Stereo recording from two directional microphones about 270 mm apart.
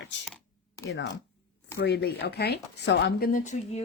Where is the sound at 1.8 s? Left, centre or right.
Left.